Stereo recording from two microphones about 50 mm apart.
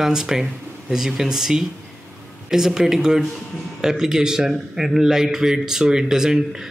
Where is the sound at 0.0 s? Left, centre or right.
Centre.